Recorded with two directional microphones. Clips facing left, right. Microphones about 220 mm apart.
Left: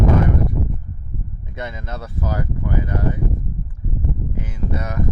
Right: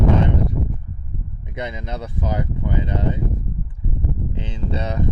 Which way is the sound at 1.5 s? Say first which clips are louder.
Right 2 dB; 20° right (ahead or behind).